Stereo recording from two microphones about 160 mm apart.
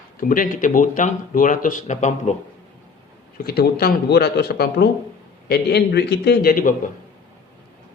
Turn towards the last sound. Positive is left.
turn(degrees=60)  # may be behind; listen again after turning